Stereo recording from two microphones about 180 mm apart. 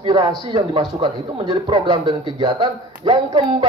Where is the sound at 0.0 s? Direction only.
25° right (ahead or behind).